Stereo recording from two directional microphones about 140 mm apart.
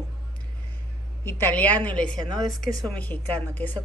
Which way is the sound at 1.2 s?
15° left (ahead or behind).